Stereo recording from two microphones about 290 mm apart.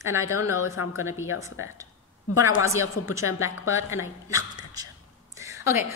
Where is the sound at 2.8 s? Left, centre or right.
Left.